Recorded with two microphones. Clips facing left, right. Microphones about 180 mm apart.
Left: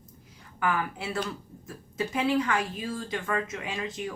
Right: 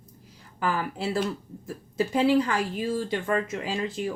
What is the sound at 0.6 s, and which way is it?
A woman's voice, 30° right (ahead or behind).